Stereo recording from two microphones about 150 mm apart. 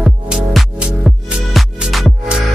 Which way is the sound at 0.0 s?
5° right (ahead or behind).